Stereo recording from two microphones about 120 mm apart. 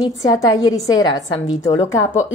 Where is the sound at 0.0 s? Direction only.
30° left (ahead or behind).